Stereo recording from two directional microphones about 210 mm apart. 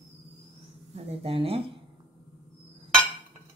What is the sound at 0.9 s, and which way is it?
Speech, 25° right (ahead or behind).